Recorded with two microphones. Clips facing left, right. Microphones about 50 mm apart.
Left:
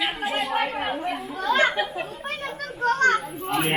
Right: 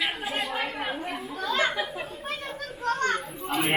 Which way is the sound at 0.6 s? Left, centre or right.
Left.